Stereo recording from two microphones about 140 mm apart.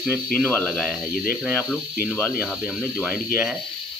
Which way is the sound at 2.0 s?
15° left (ahead or behind).